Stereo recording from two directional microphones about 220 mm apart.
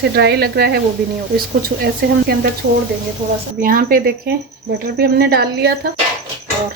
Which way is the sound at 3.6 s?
40° right (ahead or behind).